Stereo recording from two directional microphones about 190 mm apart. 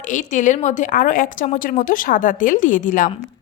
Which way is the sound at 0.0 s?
40° left (ahead or behind).